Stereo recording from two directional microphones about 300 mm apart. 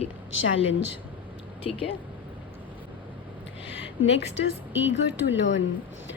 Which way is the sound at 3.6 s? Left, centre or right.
Centre.